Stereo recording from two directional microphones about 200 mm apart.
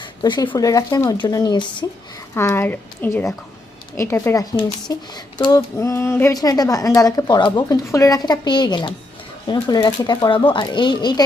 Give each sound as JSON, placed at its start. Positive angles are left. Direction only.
{"t": 0.0, "sound": "speech", "side_deg": 20}
{"t": 2.3, "sound": "a sound", "side_deg": 10}
{"t": 9.5, "sound": "speech", "side_deg": 20}